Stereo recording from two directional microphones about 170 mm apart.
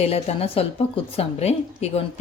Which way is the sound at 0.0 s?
35° left (ahead or behind).